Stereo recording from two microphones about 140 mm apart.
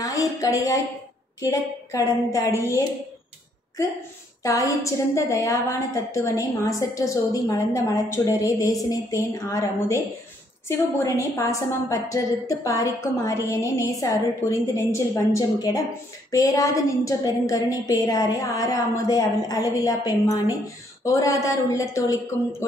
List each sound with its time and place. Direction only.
0.0 s a woman's voice: 25° left (ahead or behind)
4.4 s a woman's voice: 25° left (ahead or behind)